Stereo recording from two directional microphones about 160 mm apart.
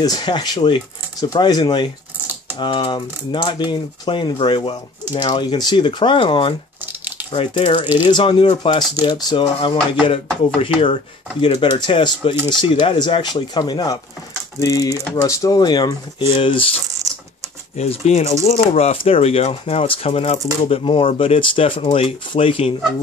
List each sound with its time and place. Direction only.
0.0 s speech: 25° left (ahead or behind)
17.7 s speech: 40° left (ahead or behind)